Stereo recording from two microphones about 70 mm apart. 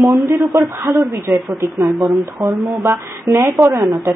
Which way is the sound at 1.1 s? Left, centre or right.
Right.